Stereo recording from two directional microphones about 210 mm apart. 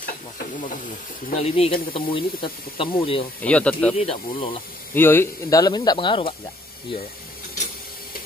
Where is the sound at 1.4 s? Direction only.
25° left (ahead or behind).